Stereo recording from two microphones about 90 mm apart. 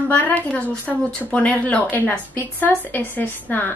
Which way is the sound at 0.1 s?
15° left (ahead or behind).